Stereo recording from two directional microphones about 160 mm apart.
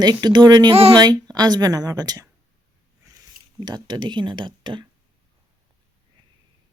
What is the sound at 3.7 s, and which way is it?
A woman's voice, 25° right (ahead or behind).